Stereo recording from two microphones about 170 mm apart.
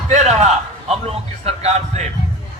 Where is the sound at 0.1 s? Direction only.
40° right (ahead or behind).